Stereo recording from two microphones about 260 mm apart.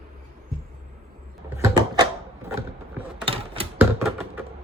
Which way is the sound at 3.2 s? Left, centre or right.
Right.